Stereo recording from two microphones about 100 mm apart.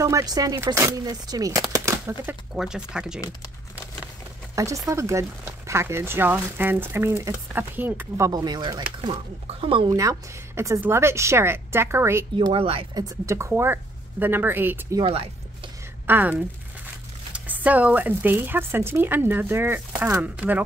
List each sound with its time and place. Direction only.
0.0 s speech: 35° right (ahead or behind)
2.5 s speech: 5° right (ahead or behind)
4.6 s speech: 35° right (ahead or behind)
8.2 s speech: 40° right (ahead or behind)
9.5 s speech: 60° right (ahead or behind)
9.8 s speech: 35° right (ahead or behind)
12.4 s speech: 65° right (ahead or behind)
12.9 s speech: 30° right (ahead or behind)
15.0 s music: 60° right (ahead or behind)
16.1 s speech: 20° right (ahead or behind)